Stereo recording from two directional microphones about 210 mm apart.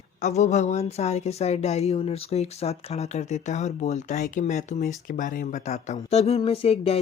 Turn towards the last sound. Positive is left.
turn(degrees=30)  # may be behind; listen again after turning